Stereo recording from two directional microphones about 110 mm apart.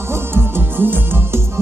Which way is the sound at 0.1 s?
20° right (ahead or behind).